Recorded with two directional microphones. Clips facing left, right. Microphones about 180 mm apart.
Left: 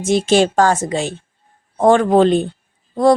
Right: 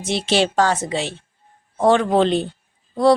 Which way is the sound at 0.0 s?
45° left (ahead or behind).